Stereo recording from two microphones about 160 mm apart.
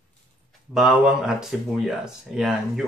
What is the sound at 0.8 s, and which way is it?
Speech, 5° right (ahead or behind).